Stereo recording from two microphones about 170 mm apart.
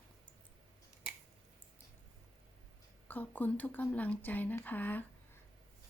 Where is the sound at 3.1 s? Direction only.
10° left (ahead or behind).